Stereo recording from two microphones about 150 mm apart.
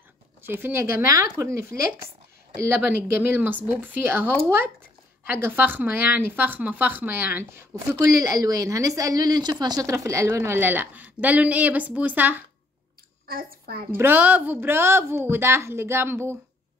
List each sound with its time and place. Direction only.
0.4 s speech: 15° right (ahead or behind)
2.7 s speech: 10° right (ahead or behind)
13.3 s a child's voice: 75° right (ahead or behind)
13.9 s speech: 15° right (ahead or behind)